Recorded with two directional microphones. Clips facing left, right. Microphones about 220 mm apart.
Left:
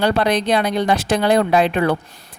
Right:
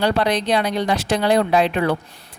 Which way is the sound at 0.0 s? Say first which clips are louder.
Left 2 dB; 50° left (ahead or behind).